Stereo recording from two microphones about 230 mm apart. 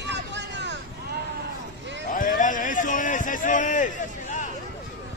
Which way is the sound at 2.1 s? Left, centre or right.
Left.